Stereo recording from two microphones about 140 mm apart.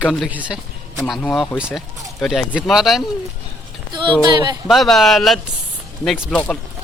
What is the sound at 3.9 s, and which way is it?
Speech, 35° right (ahead or behind).